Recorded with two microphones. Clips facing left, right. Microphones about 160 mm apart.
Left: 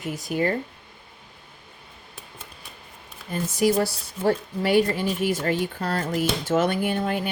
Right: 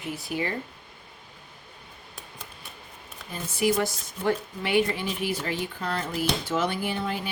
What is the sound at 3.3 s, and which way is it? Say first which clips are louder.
Speech: left 4 dB; 40° left (ahead or behind).